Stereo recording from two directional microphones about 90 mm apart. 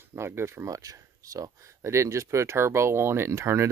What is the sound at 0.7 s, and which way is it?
Speech, 40° right (ahead or behind).